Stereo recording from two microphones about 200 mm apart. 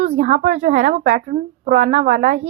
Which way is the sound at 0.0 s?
35° right (ahead or behind).